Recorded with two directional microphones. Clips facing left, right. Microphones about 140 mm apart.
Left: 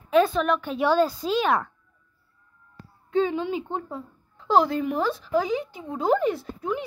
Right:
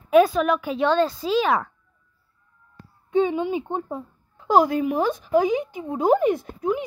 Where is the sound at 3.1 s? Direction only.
15° right (ahead or behind).